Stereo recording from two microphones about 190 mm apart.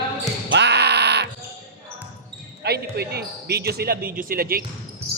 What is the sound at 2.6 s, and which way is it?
Speech, 55° right (ahead or behind).